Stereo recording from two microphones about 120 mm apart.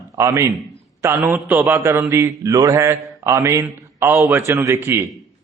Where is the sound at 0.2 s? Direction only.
25° right (ahead or behind).